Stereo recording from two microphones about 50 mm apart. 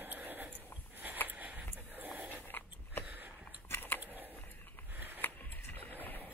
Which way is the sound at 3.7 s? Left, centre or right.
Left.